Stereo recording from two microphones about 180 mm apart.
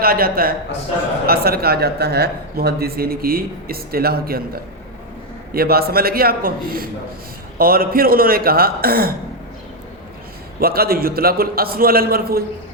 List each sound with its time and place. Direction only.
0.0 s a man's voice: 55° right (ahead or behind)
10.6 s a man's voice: 55° right (ahead or behind)